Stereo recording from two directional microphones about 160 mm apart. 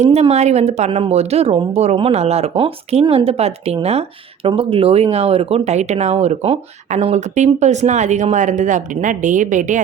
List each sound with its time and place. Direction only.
0.0 s speech: 40° right (ahead or behind)